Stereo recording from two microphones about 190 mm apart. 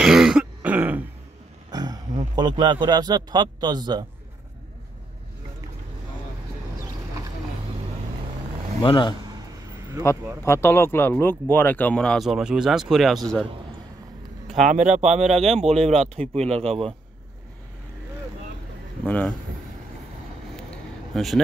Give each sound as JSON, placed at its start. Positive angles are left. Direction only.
{"t": 0.0, "sound": "throat clearing", "side_deg": -5}
{"t": 1.7, "sound": "speech", "side_deg": -20}
{"t": 8.8, "sound": "speech", "side_deg": 25}
{"t": 10.4, "sound": "speech", "side_deg": 15}
{"t": 14.7, "sound": "speech", "side_deg": -40}
{"t": 19.0, "sound": "speech", "side_deg": 5}
{"t": 21.1, "sound": "speech", "side_deg": 0}